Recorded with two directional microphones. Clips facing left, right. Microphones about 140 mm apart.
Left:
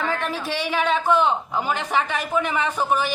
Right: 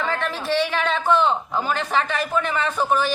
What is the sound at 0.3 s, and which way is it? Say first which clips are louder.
A woman's voice: right 3 dB; 10° left (ahead or behind).